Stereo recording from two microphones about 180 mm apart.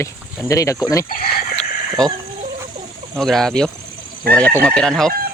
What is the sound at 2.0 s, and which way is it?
Speech, 5° left (ahead or behind).